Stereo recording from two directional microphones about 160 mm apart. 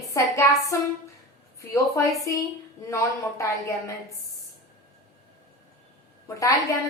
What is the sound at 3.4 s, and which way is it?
Speech, 20° left (ahead or behind).